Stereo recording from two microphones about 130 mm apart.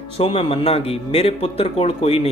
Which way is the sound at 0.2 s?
50° left (ahead or behind).